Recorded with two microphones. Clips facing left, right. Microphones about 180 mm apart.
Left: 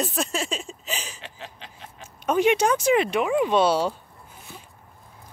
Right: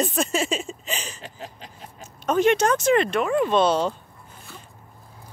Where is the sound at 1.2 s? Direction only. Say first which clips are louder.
Right 2 dB; 40° right (ahead or behind).